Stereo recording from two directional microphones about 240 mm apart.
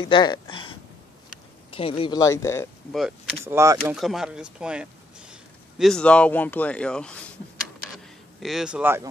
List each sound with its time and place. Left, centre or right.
0.0 s speech: centre
1.7 s speech: left
3.4 s speech: centre
8.4 s speech: centre